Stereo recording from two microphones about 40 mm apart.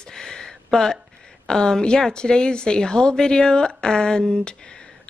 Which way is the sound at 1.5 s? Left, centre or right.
Centre.